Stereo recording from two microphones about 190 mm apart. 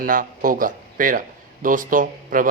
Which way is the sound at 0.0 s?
45° right (ahead or behind).